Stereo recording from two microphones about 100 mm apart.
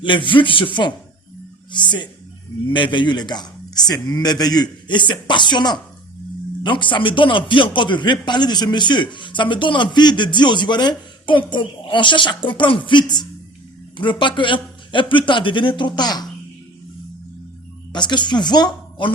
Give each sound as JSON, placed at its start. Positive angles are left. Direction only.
{"t": 0.0, "sound": "a man's voice", "side_deg": 55}
{"t": 17.9, "sound": "speech", "side_deg": 50}